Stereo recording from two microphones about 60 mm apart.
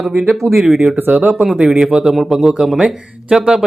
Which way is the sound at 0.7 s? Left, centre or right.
Centre.